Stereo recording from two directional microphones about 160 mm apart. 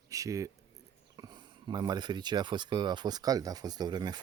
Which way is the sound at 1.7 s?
25° right (ahead or behind).